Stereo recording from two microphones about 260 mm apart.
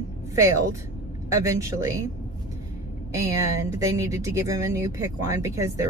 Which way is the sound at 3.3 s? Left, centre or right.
Left.